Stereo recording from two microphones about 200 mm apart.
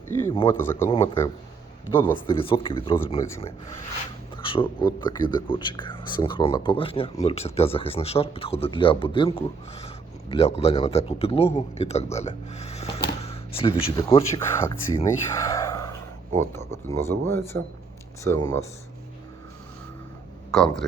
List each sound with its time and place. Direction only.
0.1 s speech: 10° left (ahead or behind)
2.1 s speech: 25° left (ahead or behind)
4.4 s a sound: 25° left (ahead or behind)
4.8 s speech: 20° left (ahead or behind)
20.5 s speech: 5° left (ahead or behind)